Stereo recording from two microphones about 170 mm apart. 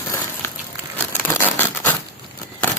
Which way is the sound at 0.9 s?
10° left (ahead or behind).